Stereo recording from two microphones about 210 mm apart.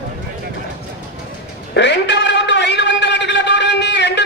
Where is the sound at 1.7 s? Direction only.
55° left (ahead or behind).